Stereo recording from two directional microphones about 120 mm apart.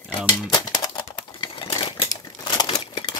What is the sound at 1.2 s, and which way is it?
Typewriter, 45° left (ahead or behind).